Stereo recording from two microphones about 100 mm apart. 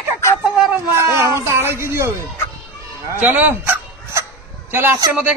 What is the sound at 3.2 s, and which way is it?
Speech, 15° right (ahead or behind).